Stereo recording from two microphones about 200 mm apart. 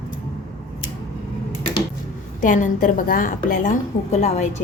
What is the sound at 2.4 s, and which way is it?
A woman's voice, 40° left (ahead or behind).